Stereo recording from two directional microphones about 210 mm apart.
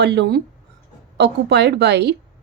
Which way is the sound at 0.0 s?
50° right (ahead or behind).